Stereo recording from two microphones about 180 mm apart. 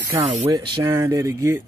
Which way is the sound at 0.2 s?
30° right (ahead or behind).